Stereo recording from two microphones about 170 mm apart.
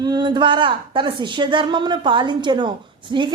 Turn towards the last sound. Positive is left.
turn(degrees=-25)  # may be behind; listen again after turning